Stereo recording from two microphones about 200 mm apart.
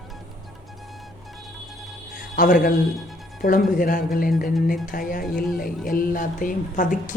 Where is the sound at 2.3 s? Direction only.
45° left (ahead or behind).